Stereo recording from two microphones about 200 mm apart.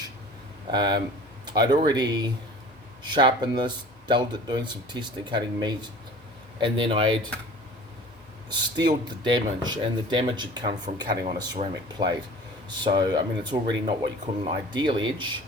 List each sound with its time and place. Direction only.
0.7 s speech: 20° right (ahead or behind)
8.4 s speech: 20° right (ahead or behind)
10.9 s speech: 35° right (ahead or behind)
12.0 s speech: 25° right (ahead or behind)